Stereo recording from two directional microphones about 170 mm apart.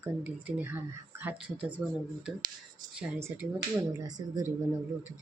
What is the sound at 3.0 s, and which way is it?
Speech, 10° right (ahead or behind).